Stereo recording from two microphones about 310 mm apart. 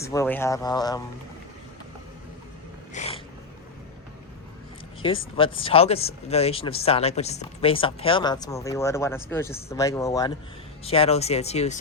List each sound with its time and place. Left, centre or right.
0.0 s speech: centre
2.9 s cat: left
5.0 s speech: centre